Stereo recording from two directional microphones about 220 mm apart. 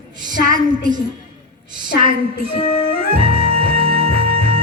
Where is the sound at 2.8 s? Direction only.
25° right (ahead or behind).